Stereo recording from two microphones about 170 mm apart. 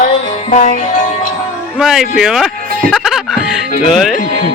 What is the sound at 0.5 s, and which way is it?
Music, 50° left (ahead or behind).